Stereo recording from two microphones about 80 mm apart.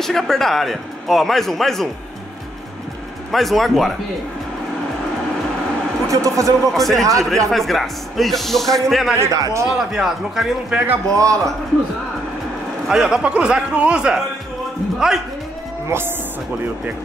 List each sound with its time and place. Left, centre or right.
0.0 s a man's voice: centre
3.3 s a man's voice: centre
6.0 s a man's voice: right
6.7 s a man's voice: centre
9.2 s a man's voice: right
9.7 s a man's voice: centre
11.1 s a man's voice: right
12.8 s a man's voice: centre